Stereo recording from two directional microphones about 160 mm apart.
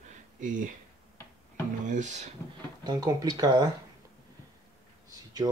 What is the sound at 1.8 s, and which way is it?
Speech, 50° right (ahead or behind).